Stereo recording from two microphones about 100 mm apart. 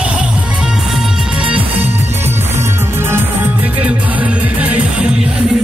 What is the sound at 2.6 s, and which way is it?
Music, 25° right (ahead or behind).